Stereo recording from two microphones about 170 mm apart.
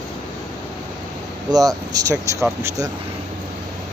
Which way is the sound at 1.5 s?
20° right (ahead or behind).